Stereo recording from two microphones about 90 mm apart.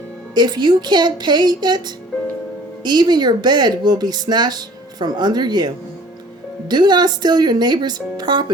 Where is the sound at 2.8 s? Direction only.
50° right (ahead or behind).